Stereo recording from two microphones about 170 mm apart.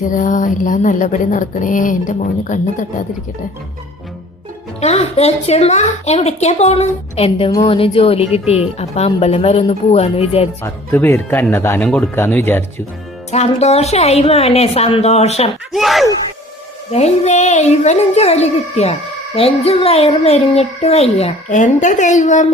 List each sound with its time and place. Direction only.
0.0 s a sound: 50° left (ahead or behind)
4.8 s a child's voice: 40° left (ahead or behind)
10.6 s speech: 15° left (ahead or behind)
13.3 s a child's voice: 40° left (ahead or behind)
15.7 s speech: centre (ahead or behind)
16.9 s a child's voice: 40° left (ahead or behind)